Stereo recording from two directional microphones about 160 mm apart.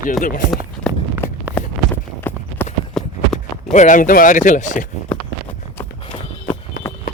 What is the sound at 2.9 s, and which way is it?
Walk, 5° left (ahead or behind).